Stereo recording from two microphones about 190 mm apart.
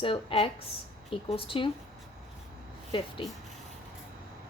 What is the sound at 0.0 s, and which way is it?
Speech, 30° left (ahead or behind).